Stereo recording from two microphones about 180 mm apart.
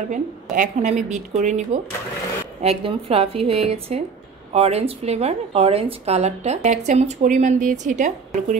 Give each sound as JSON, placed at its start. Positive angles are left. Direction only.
{"t": 0.1, "sound": "a woman's voice", "side_deg": -45}